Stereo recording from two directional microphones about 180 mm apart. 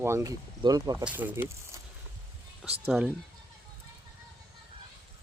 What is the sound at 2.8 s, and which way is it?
Speech, centre (ahead or behind).